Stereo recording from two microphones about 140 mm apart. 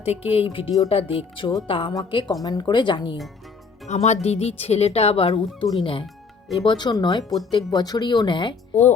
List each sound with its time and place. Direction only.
0.0 s speech: 45° left (ahead or behind)
3.8 s speech: 50° left (ahead or behind); by 8.5 s 35° left (ahead or behind)
8.7 s speech: 55° left (ahead or behind)